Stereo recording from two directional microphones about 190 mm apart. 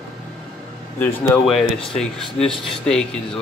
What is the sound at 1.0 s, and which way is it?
Speech, 10° left (ahead or behind).